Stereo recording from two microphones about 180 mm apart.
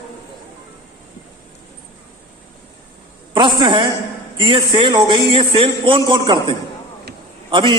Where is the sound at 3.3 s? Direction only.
25° right (ahead or behind).